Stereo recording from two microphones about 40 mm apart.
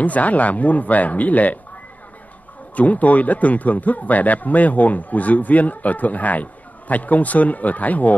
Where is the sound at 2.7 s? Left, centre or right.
Left.